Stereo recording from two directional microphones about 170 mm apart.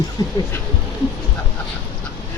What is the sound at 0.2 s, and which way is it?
Speech, 20° left (ahead or behind).